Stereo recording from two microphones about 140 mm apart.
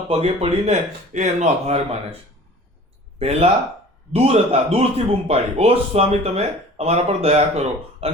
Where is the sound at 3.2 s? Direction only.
45° right (ahead or behind).